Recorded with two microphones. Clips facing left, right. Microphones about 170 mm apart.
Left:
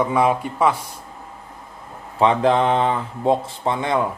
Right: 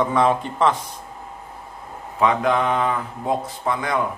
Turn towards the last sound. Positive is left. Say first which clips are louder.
# left 2 dB
turn(degrees=25)  # may be behind; listen again after turning